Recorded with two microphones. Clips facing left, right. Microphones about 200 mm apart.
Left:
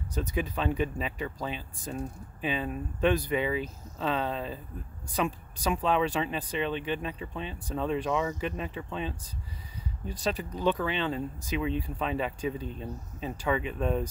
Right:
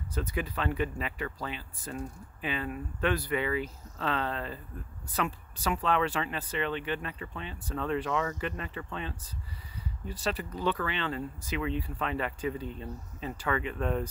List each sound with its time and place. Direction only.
0.1 s speech: 15° left (ahead or behind)